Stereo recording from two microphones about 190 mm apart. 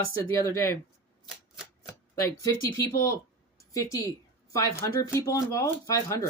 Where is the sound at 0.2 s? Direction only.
15° left (ahead or behind).